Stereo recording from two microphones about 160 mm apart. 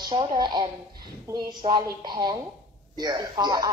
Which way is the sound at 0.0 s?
30° right (ahead or behind).